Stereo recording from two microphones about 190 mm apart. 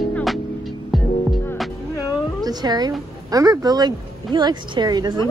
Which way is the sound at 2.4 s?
20° right (ahead or behind).